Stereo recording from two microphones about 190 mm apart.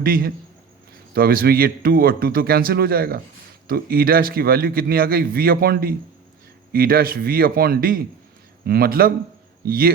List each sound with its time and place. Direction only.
0.0 s speech: 50° right (ahead or behind)